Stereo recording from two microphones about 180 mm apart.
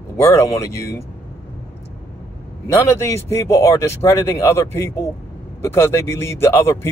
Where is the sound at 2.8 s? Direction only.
15° left (ahead or behind).